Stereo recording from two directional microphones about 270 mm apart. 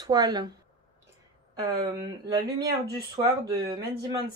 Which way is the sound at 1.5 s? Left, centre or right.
Centre.